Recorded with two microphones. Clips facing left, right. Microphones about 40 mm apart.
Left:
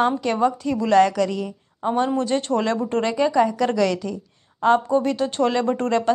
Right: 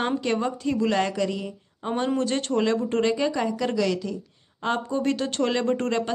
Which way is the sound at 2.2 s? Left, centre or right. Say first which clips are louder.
Left 4 dB; right.